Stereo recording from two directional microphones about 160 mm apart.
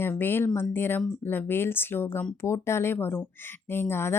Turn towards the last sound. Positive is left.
turn(degrees=15)  # may be behind; listen again after turning